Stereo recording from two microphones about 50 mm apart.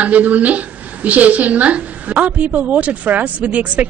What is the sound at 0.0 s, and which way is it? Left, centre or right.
Speech, right.